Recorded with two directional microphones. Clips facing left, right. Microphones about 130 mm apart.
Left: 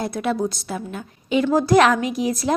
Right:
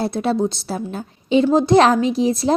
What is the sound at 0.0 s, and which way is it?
A woman's voice, 30° right (ahead or behind).